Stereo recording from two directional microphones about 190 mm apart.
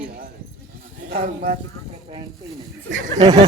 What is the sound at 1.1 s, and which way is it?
Speech, 45° right (ahead or behind).